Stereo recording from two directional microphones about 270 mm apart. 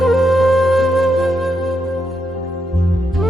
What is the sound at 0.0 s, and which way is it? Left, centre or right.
Flute, centre.